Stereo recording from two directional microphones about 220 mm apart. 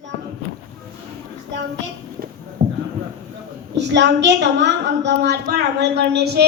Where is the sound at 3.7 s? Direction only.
50° right (ahead or behind).